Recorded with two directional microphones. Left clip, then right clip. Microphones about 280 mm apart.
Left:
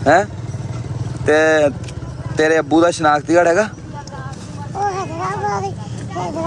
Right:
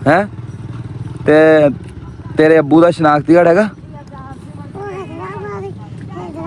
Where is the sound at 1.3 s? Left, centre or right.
Centre.